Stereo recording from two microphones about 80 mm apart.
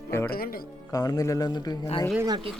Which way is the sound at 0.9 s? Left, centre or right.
Left.